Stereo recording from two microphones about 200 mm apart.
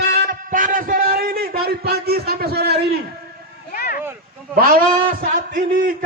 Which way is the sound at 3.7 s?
50° left (ahead or behind).